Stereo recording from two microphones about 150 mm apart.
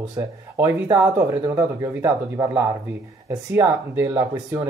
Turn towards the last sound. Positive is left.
turn(degrees=-15)  # may be behind; listen again after turning